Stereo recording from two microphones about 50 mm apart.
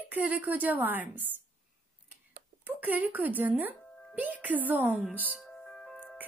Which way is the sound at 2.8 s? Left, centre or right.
Right.